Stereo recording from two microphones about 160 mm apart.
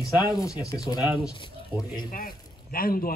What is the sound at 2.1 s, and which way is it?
A man's voice, 60° left (ahead or behind).